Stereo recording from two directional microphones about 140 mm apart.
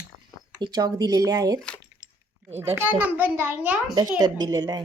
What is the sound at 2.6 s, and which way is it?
A child's voice, 15° right (ahead or behind).